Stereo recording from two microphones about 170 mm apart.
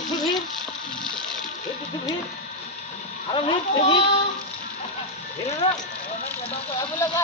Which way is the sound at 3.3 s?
30° left (ahead or behind).